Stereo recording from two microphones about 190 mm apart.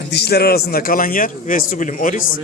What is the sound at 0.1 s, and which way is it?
A man's voice, 60° left (ahead or behind).